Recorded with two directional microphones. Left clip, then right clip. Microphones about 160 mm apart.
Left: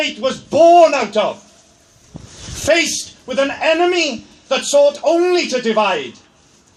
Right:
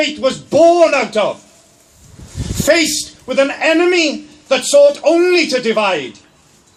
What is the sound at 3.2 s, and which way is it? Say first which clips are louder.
Speech: right 2 dB; 45° right (ahead or behind).